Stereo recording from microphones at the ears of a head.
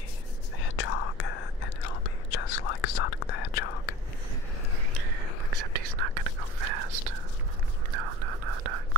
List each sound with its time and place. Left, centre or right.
0.6 s whispering: left
4.9 s whispering: right